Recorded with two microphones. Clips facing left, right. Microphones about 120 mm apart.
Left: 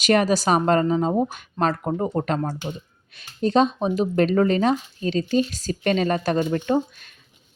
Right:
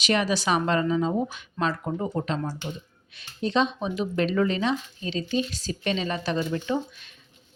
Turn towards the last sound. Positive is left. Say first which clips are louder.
# left 6 dB
turn(degrees=50)  # may be behind; listen again after turning